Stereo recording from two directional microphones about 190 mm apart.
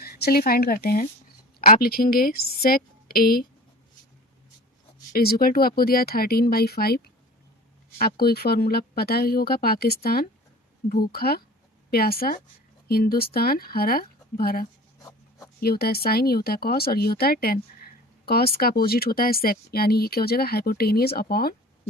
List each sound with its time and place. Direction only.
0.0 s speech: 55° left (ahead or behind)
5.1 s speech: 50° left (ahead or behind)